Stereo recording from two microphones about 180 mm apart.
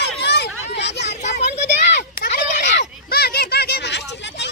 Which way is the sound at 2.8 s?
60° left (ahead or behind).